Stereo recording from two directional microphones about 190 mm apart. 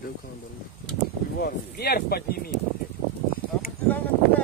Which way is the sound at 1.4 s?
55° left (ahead or behind).